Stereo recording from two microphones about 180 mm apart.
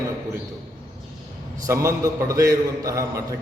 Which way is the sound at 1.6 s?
15° right (ahead or behind).